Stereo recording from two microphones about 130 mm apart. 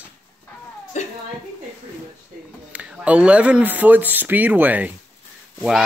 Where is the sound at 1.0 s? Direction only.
65° left (ahead or behind).